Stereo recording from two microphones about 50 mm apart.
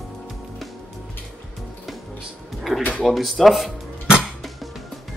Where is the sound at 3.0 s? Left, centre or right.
Centre.